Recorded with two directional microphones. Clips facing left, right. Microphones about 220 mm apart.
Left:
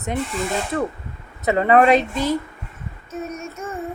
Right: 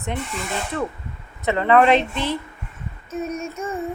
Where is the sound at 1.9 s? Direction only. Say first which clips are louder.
Left 2 dB; 40° left (ahead or behind).